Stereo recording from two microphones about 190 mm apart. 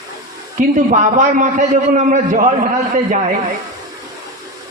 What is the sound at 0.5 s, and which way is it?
Speech, 40° right (ahead or behind).